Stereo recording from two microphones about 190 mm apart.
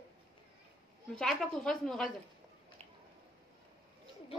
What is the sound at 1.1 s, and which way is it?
Speech, 5° left (ahead or behind).